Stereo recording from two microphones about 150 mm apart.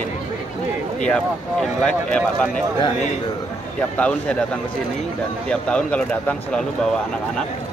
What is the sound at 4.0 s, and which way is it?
Speech, 10° left (ahead or behind).